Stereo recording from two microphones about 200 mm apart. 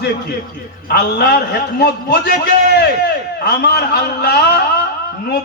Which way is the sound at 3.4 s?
55° left (ahead or behind).